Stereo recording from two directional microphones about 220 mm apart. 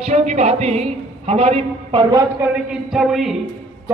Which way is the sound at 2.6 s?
Centre (ahead or behind).